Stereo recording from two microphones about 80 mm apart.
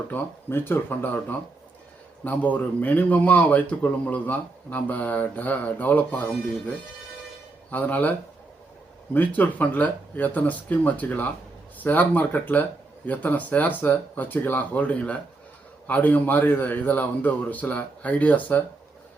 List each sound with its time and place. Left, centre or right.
0.1 s speech: left
7.7 s speech: left
9.1 s speech: left